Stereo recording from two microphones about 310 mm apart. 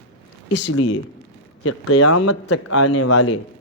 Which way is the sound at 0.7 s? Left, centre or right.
Left.